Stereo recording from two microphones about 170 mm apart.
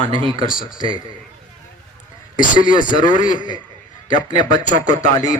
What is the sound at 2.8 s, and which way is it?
Speech, 25° left (ahead or behind).